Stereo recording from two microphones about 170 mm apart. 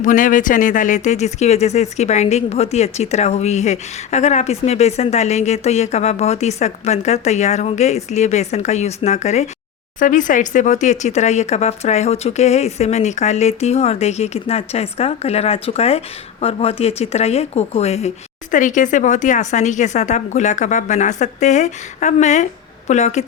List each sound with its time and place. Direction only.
0.0 s speech: 50° left (ahead or behind)
18.5 s speech: 50° left (ahead or behind)